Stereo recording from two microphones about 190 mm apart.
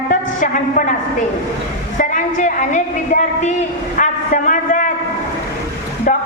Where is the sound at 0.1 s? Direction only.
45° left (ahead or behind).